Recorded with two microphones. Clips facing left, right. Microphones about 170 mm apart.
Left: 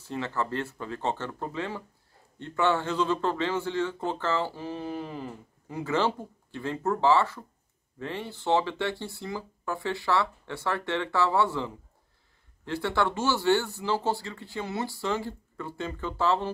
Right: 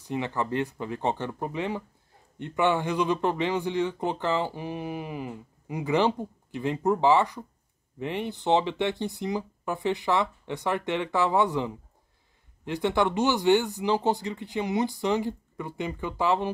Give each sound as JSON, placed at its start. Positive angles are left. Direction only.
{"t": 0.0, "sound": "a man's voice", "side_deg": -15}